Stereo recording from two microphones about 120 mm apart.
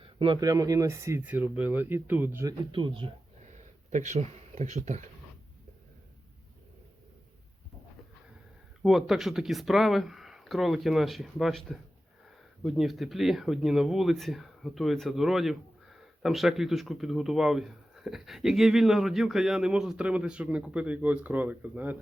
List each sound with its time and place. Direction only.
0.0 s a sound: 45° right (ahead or behind)
0.4 s speech: 30° right (ahead or behind)
2.7 s speech: 45° right (ahead or behind)
3.8 s speech: 80° right
8.8 s speech: 5° right (ahead or behind)